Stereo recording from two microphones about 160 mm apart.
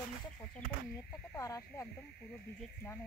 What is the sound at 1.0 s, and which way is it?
Speech, 20° left (ahead or behind).